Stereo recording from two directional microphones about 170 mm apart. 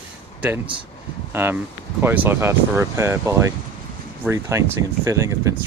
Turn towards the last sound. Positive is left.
turn(degrees=-20)  # may be behind; listen again after turning